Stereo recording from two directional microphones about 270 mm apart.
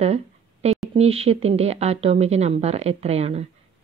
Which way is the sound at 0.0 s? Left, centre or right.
Right.